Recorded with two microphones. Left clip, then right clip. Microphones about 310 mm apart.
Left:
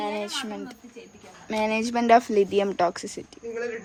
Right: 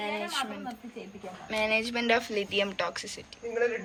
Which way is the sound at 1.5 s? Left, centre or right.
Left.